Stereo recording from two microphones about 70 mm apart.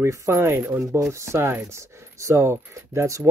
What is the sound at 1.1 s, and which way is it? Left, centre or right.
Speech, right.